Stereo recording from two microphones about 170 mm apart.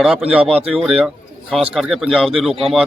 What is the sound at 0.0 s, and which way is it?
Speech, 5° right (ahead or behind).